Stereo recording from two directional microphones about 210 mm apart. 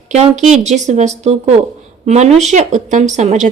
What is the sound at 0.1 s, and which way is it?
Speech, 30° right (ahead or behind).